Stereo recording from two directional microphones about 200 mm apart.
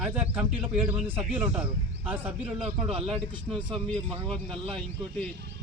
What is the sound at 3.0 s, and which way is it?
Speech, centre (ahead or behind).